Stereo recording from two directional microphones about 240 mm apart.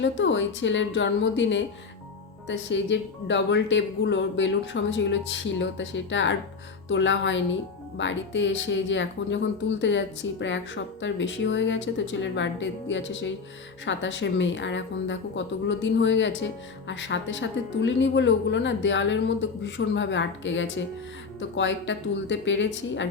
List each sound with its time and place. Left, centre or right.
0.0 s speech: left